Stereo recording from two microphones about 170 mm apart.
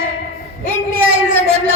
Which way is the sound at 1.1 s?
65° right (ahead or behind).